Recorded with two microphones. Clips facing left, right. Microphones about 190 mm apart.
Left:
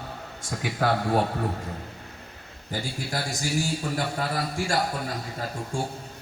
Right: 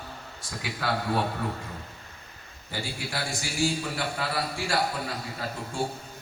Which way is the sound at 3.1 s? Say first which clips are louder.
Left 4 dB; 40° left (ahead or behind).